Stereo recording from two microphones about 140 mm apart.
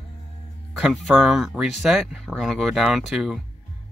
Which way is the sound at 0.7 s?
Centre (ahead or behind).